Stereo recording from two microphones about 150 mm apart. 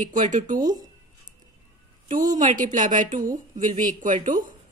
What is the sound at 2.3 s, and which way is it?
A woman's voice, 60° right (ahead or behind).